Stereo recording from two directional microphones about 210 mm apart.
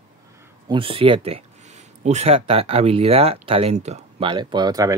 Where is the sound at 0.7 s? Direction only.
25° right (ahead or behind).